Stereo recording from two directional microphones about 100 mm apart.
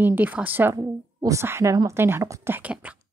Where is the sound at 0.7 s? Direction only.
35° right (ahead or behind); by 3.0 s 15° right (ahead or behind).